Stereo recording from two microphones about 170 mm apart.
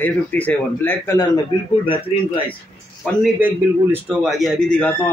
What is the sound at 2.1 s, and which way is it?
Speech, 40° left (ahead or behind).